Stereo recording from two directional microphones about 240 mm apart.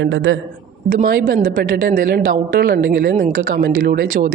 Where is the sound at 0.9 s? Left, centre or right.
Right.